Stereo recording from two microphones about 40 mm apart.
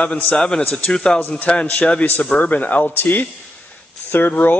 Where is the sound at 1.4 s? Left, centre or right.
Left.